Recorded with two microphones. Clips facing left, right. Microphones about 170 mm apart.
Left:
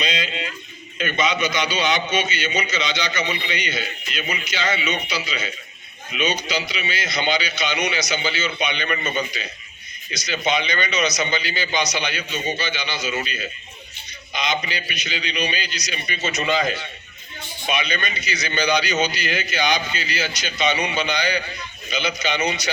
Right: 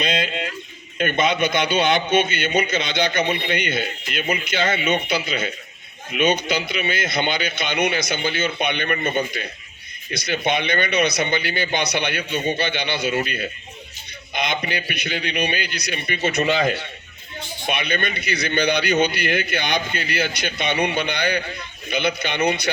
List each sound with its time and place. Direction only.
0.0 s a sound: 55° right (ahead or behind)
0.9 s a man's voice: 55° right (ahead or behind)
17.7 s a man's voice: 55° right (ahead or behind)